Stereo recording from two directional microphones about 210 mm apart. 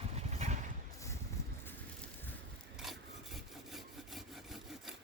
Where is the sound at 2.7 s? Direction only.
Centre (ahead or behind).